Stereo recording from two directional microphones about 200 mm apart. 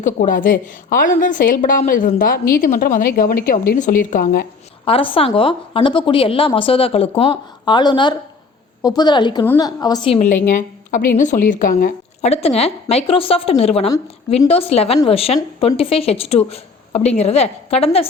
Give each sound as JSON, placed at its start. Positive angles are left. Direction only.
{"t": 0.0, "sound": "a woman's voice", "side_deg": 40}
{"t": 4.9, "sound": "a woman's voice", "side_deg": 25}
{"t": 12.2, "sound": "a woman's voice", "side_deg": 30}